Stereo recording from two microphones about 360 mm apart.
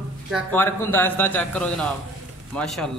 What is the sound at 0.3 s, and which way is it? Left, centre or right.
A man's voice, centre.